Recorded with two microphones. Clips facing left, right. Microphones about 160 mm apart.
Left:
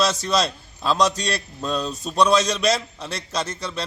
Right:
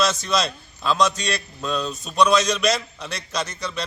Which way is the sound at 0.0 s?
35° left (ahead or behind).